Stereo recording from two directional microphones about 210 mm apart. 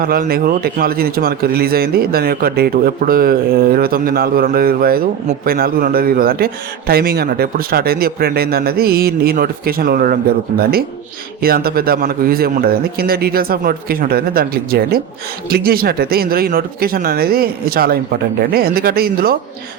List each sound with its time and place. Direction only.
0.0 s a man's voice: 45° right (ahead or behind)
11.4 s a man's voice: 45° right (ahead or behind)